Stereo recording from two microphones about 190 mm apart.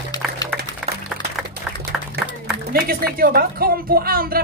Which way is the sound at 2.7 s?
50° right (ahead or behind).